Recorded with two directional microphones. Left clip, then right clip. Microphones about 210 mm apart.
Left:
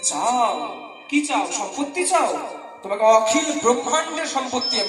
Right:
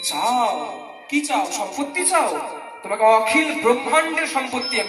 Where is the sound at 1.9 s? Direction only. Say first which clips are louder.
Even; 15° left (ahead or behind).